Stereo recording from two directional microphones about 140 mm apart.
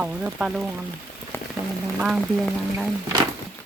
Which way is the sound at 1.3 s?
15° left (ahead or behind).